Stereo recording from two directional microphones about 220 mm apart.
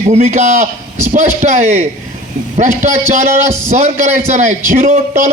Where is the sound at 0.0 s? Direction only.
35° right (ahead or behind).